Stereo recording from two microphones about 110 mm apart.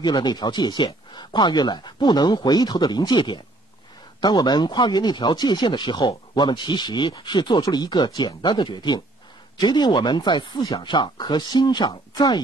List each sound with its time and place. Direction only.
0.0 s speech: 40° left (ahead or behind)